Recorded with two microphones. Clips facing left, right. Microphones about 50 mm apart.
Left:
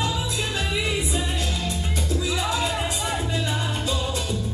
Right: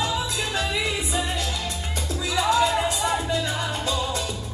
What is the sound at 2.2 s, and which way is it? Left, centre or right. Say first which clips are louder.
Music: right 6 dB; right.